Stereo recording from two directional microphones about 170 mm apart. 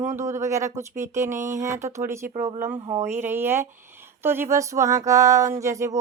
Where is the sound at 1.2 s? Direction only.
45° right (ahead or behind).